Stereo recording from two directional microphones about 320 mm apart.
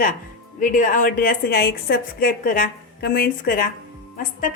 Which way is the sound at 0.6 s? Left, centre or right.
Left.